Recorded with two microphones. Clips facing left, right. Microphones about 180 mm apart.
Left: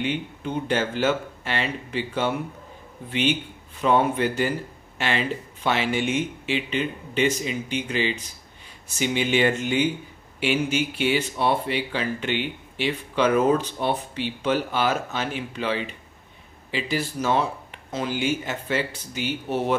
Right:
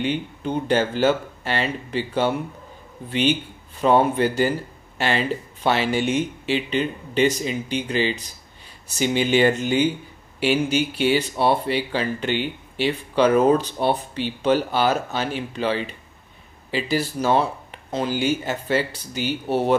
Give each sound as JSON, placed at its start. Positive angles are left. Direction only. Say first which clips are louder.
{"t": 0.0, "sound": "speech", "louder": "right 3 dB", "side_deg": -35}